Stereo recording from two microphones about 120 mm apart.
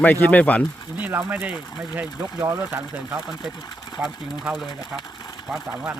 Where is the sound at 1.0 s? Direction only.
15° right (ahead or behind).